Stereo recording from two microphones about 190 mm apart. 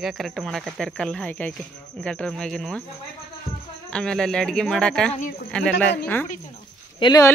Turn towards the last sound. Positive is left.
turn(degrees=20)  # may be behind; listen again after turning